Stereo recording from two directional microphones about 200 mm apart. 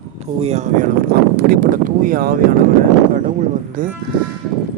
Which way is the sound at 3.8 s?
40° right (ahead or behind).